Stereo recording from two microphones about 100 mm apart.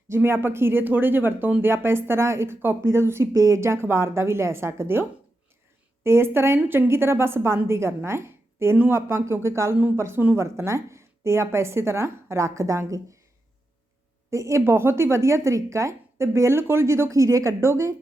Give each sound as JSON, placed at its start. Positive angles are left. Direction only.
{"t": 0.1, "sound": "a woman's voice", "side_deg": -25}
{"t": 14.3, "sound": "a woman's voice", "side_deg": -30}